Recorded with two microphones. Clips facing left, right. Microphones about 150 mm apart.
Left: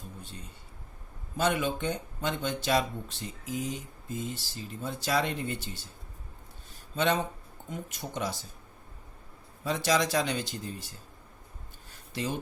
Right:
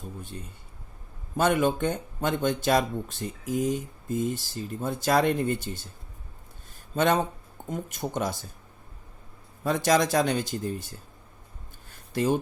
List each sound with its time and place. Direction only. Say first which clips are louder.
0.2 s speech: right 5 dB; 50° right (ahead or behind)
6.9 s speech: right 4 dB; 50° right (ahead or behind)
9.6 s speech: right 4 dB; 50° right (ahead or behind)
12.1 s speech: right 9 dB; 50° right (ahead or behind)